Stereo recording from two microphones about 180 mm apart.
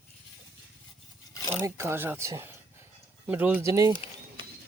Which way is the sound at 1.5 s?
15° right (ahead or behind).